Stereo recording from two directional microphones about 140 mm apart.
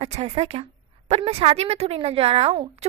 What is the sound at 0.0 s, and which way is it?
A woman's voice, 50° right (ahead or behind).